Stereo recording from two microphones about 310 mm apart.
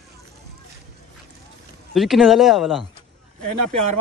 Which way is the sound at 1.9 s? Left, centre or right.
Centre.